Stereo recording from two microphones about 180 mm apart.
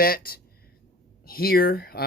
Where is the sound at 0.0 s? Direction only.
55° left (ahead or behind).